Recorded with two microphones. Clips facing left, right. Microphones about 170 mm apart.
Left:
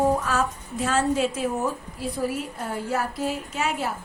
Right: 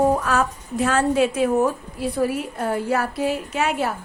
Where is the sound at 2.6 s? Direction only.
65° right (ahead or behind).